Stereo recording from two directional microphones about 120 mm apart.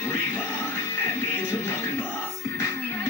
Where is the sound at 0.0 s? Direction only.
20° left (ahead or behind).